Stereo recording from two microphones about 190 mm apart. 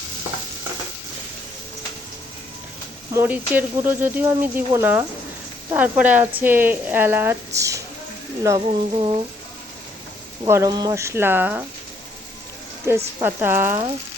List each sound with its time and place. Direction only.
3.1 s speech: 10° right (ahead or behind)
10.4 s speech: 20° right (ahead or behind)
12.9 s speech: 10° right (ahead or behind)